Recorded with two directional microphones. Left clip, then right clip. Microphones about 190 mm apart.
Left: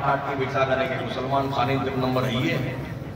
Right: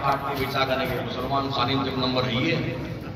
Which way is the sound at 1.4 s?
30° left (ahead or behind).